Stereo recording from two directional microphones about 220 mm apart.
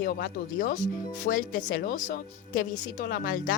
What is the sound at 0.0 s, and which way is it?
Speech, 40° left (ahead or behind).